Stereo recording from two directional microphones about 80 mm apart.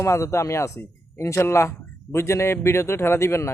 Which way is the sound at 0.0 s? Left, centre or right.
Left.